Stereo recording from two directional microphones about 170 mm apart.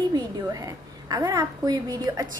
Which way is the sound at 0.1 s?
20° right (ahead or behind).